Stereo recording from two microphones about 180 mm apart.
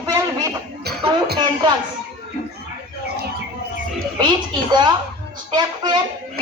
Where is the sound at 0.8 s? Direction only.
60° right (ahead or behind).